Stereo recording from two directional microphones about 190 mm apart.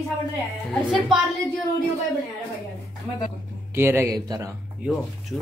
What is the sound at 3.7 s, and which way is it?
Speech, 10° right (ahead or behind).